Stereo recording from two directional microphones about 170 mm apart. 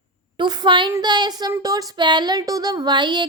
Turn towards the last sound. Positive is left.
turn(degrees=-25)  # may be behind; listen again after turning